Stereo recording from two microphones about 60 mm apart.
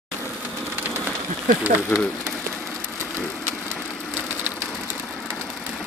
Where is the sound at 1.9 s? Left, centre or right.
Left.